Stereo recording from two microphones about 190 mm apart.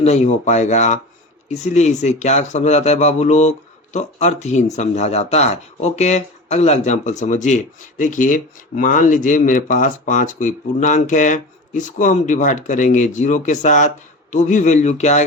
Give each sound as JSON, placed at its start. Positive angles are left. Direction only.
{"t": 0.0, "sound": "speech", "side_deg": 35}